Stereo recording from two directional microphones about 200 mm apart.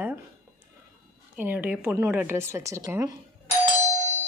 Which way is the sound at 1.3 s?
10° right (ahead or behind).